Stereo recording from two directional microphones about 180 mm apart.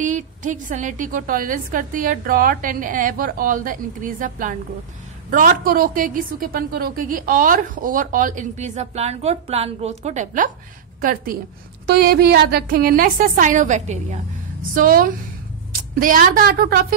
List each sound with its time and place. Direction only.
0.0 s a woman's voice: 45° right (ahead or behind)
14.7 s a woman's voice: 55° right (ahead or behind)